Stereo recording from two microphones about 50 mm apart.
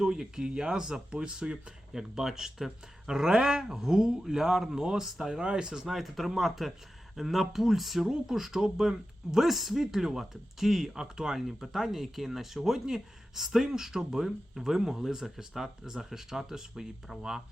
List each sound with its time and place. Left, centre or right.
0.0 s speech: centre
5.9 s speech: centre